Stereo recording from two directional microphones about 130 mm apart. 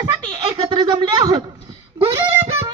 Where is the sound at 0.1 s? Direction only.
35° right (ahead or behind).